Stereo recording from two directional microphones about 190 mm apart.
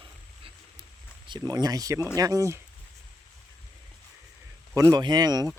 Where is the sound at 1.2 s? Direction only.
20° right (ahead or behind).